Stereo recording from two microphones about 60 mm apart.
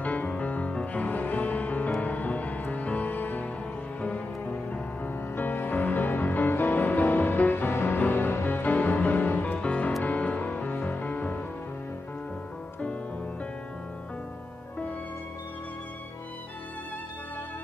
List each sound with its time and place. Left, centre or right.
0.0 s music: left
5.0 s music: left